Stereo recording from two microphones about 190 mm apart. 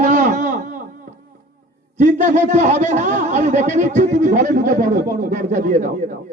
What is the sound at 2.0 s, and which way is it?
A man's voice, 40° right (ahead or behind).